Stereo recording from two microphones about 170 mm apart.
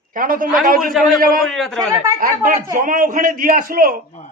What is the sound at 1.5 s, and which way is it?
Speech, centre (ahead or behind).